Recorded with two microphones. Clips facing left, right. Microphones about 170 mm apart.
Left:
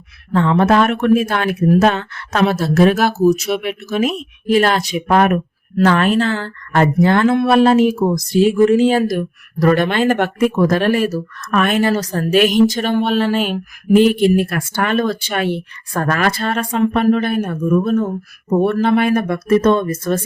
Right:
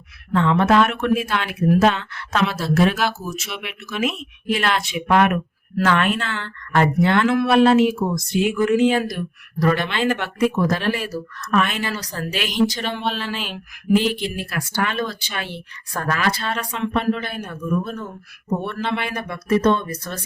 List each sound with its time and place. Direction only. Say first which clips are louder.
0.3 s speech: left 3 dB; 40° left (ahead or behind)